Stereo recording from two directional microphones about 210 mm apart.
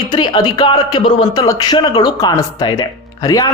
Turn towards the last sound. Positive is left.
turn(degrees=15)  # may be behind; listen again after turning